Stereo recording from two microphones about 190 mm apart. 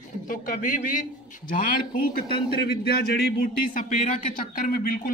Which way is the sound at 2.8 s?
55° left (ahead or behind).